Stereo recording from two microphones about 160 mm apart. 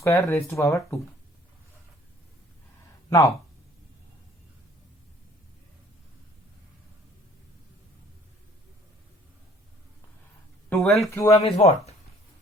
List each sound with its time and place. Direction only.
0.0 s speech: 15° left (ahead or behind)
3.1 s speech: 20° left (ahead or behind)
10.8 s speech: centre (ahead or behind)
11.1 s speech: 20° left (ahead or behind)
11.3 s speech: 40° left (ahead or behind)